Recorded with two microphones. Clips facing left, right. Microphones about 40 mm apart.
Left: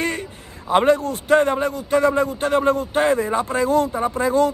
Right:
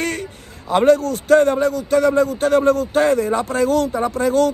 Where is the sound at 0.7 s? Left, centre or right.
Left.